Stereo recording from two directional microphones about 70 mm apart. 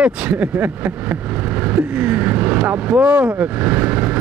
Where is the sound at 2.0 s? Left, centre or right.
Right.